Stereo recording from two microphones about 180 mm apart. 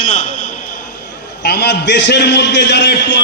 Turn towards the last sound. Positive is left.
turn(degrees=70)  # may be behind; listen again after turning